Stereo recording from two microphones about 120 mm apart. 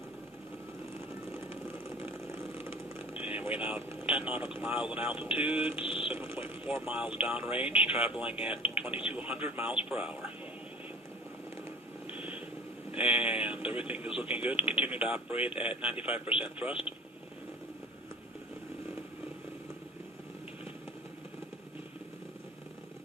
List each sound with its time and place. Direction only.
3.2 s vehicle: 10° right (ahead or behind)
4.4 s speech: 15° right (ahead or behind)
5.7 s a sound: 50° left (ahead or behind)
6.1 s mechanisms: 15° right (ahead or behind)
6.8 s speech: 10° right (ahead or behind)
8.9 s speech: 50° left (ahead or behind)
9.1 s speech: 10° right (ahead or behind)
12.1 s a sound: 10° right (ahead or behind)
12.9 s speech: 10° right (ahead or behind)